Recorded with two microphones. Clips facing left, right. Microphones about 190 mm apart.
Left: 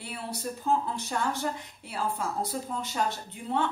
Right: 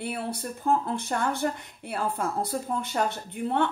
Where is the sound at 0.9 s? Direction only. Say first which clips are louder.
Right 3 dB; 55° right (ahead or behind).